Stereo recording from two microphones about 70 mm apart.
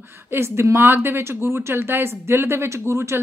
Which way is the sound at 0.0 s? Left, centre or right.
Right.